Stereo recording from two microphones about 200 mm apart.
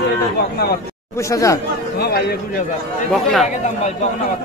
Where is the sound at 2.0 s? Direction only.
50° left (ahead or behind).